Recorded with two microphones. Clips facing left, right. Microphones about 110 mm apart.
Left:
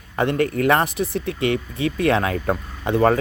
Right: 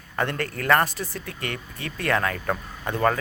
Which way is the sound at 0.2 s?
15° left (ahead or behind).